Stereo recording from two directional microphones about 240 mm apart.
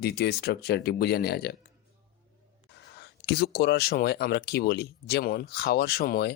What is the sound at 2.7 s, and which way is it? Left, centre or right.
Speech, left.